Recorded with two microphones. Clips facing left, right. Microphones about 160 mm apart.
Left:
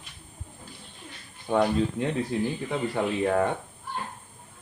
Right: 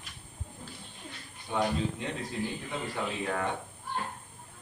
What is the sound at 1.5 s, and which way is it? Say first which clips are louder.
Speech: left 6 dB; 55° left (ahead or behind).